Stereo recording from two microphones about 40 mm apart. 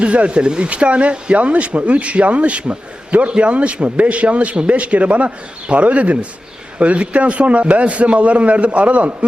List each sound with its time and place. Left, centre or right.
0.0 s speech: right